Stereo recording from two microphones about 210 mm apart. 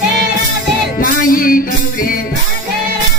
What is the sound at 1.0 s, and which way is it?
Music, 40° left (ahead or behind).